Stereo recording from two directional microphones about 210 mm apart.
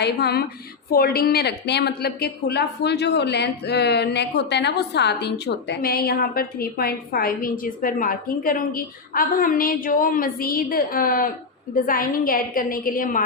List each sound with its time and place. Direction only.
0.0 s a woman's voice: 50° left (ahead or behind)